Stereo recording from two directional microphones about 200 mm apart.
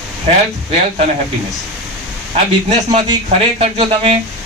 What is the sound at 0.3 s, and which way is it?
Speech, 30° right (ahead or behind).